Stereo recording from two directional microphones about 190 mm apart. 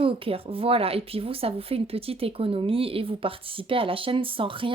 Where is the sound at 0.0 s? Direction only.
30° right (ahead or behind).